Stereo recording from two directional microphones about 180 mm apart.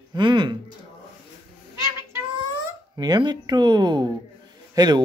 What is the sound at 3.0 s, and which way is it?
Speech, 25° right (ahead or behind).